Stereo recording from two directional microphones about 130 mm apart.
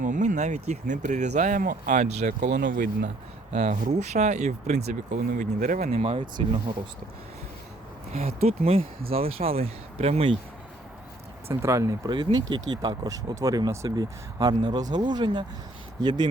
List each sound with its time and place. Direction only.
0.0 s speech: 75° right (ahead or behind)
3.5 s speech: 65° right (ahead or behind)
8.1 s speech: 50° right (ahead or behind)
11.4 s speech: 25° right (ahead or behind)